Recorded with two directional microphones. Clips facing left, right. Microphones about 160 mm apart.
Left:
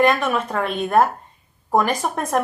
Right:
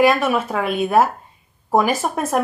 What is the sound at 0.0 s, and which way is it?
Speech, 5° right (ahead or behind).